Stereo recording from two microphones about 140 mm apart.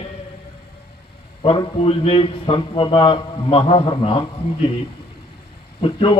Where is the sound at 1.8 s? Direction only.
45° left (ahead or behind).